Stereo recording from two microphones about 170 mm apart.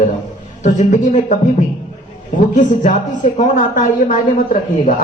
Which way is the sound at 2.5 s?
45° left (ahead or behind).